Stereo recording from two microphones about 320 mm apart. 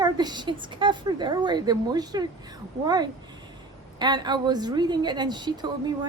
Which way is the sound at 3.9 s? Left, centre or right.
Centre.